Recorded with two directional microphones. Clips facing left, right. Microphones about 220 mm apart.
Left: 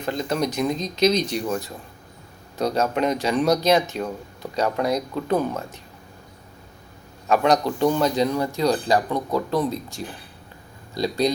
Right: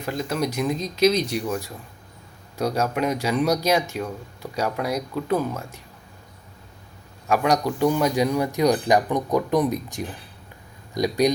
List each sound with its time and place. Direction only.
0.0 s speech: 5° right (ahead or behind)
7.3 s speech: 10° right (ahead or behind)